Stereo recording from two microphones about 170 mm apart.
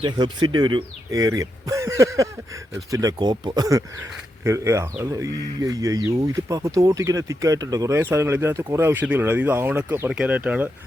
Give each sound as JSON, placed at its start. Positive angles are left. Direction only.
{"t": 0.0, "sound": "speech", "side_deg": -25}